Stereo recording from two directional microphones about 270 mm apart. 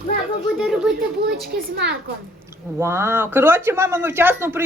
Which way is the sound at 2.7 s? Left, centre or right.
Centre.